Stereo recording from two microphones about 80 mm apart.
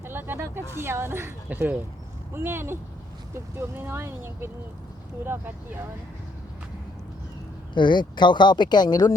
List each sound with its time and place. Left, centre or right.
0.0 s a sound: right
2.3 s speech: right
7.7 s speech: left